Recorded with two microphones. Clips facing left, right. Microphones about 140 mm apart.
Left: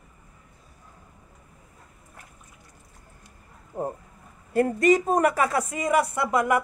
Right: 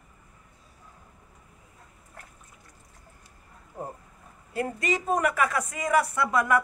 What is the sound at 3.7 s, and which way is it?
Speech, 50° left (ahead or behind).